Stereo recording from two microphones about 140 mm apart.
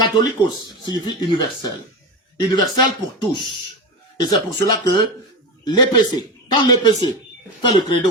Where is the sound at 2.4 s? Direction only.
30° left (ahead or behind).